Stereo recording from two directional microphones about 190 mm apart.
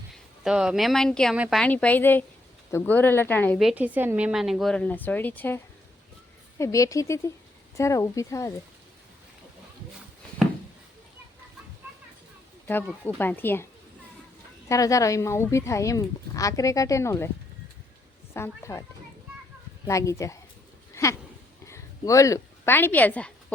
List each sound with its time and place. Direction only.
0.4 s a woman's voice: 5° right (ahead or behind)
3.6 s a woman's voice: 5° right (ahead or behind)
6.6 s speech: 15° left (ahead or behind)
13.1 s speech: 10° left (ahead or behind)
14.7 s speech: 15° left (ahead or behind)
18.3 s speech: 15° left (ahead or behind)
19.9 s speech: 15° left (ahead or behind)
20.9 s a sound: 15° left (ahead or behind)
21.7 s speech: 15° left (ahead or behind)